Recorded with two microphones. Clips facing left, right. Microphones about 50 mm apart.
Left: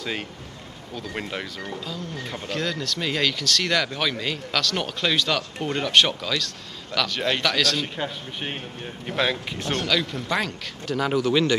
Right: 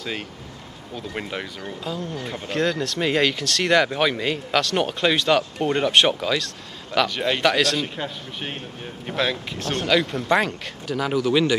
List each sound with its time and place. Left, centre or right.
0.9 s a man's voice: centre
1.6 s speech: right
5.6 s a man's voice: centre
7.2 s a man's voice: centre
7.4 s speech: right
7.7 s a man's voice: centre
9.8 s speech: right
10.9 s a man's voice: centre